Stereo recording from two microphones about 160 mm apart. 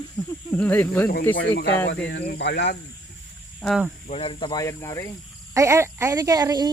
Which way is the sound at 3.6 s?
Centre (ahead or behind).